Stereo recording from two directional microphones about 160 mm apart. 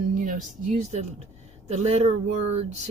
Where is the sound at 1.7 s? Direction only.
40° right (ahead or behind).